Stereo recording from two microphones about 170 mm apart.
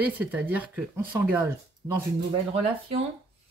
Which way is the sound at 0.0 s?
10° right (ahead or behind).